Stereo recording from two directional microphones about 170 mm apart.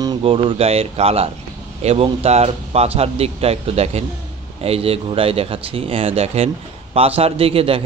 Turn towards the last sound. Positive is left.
turn(degrees=-35)  # may be behind; listen again after turning